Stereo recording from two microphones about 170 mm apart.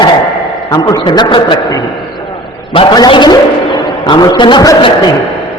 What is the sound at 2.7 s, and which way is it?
A man's voice, 25° left (ahead or behind).